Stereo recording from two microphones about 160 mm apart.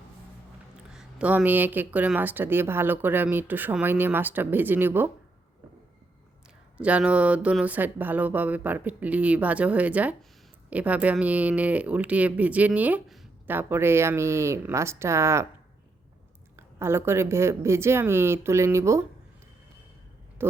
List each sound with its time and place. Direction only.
0.9 s speech: 5° right (ahead or behind)
6.7 s speech: 10° right (ahead or behind)
16.6 s speech: 15° right (ahead or behind)
20.4 s speech: 15° right (ahead or behind)